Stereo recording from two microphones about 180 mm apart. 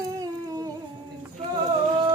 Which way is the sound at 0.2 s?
20° right (ahead or behind).